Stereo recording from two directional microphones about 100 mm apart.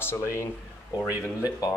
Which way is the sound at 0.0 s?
25° left (ahead or behind).